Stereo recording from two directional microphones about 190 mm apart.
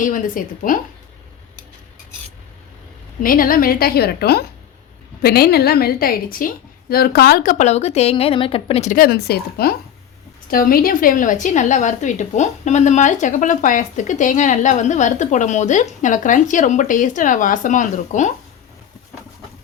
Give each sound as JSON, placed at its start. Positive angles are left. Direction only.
{"t": 0.0, "sound": "a woman's voice", "side_deg": 45}
{"t": 3.2, "sound": "a woman's voice", "side_deg": 45}